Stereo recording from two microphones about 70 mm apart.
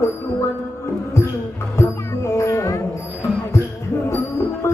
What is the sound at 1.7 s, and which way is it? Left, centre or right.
Music, left.